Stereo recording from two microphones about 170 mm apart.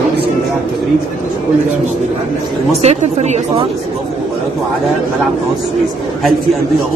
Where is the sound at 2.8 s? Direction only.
40° right (ahead or behind).